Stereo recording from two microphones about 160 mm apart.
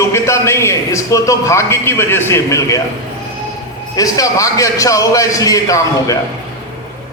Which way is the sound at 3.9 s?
20° left (ahead or behind).